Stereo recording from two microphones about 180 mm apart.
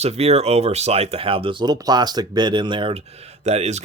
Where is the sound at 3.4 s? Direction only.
40° right (ahead or behind).